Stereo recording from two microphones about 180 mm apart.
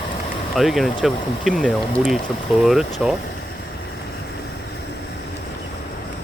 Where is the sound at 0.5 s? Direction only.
Centre (ahead or behind).